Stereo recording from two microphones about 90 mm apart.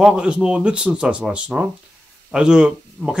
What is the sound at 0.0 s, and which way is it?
Speech, 10° right (ahead or behind).